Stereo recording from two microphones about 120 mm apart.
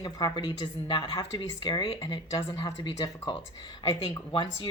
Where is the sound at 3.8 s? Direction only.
40° left (ahead or behind).